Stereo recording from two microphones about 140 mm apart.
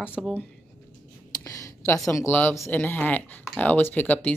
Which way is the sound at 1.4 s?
25° left (ahead or behind).